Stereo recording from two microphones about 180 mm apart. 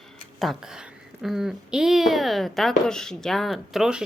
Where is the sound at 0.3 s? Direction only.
Centre (ahead or behind).